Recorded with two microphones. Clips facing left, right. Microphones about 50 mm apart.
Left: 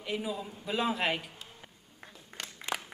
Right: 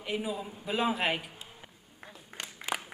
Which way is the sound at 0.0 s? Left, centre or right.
Centre.